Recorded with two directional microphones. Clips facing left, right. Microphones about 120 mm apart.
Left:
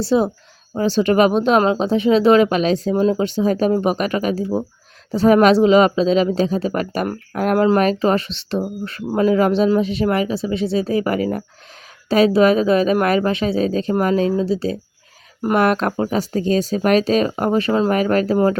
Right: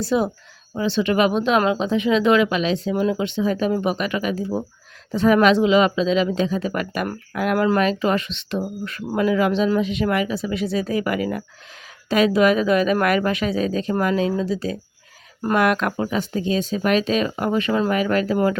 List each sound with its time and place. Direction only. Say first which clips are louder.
0.0 s speech: left 4 dB; 30° left (ahead or behind)
0.7 s speech: left 4 dB; 40° left (ahead or behind)
2.9 s speech: left 4 dB; 30° left (ahead or behind)